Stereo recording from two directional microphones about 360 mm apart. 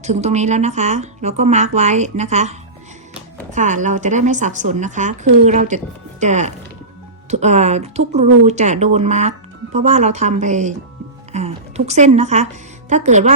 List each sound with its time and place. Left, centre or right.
0.0 s a woman's voice: centre